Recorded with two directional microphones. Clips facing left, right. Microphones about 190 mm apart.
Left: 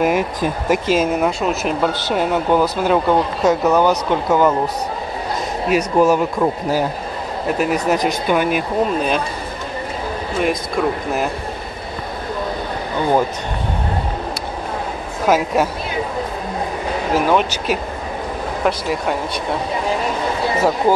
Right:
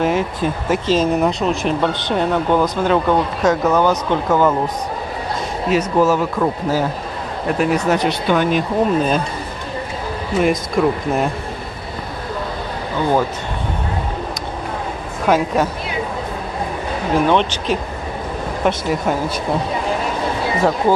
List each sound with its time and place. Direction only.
0.0 s speech: 10° left (ahead or behind)
5.7 s speech: 15° left (ahead or behind)
10.8 s speech: centre (ahead or behind)
15.2 s speech: 10° left (ahead or behind)
17.1 s speech: 5° left (ahead or behind)
18.9 s speech: centre (ahead or behind)